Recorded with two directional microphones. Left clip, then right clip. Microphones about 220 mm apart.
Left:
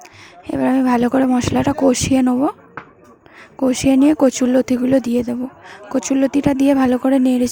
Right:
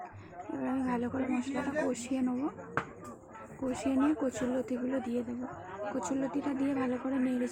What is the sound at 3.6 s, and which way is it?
Speech, 45° left (ahead or behind).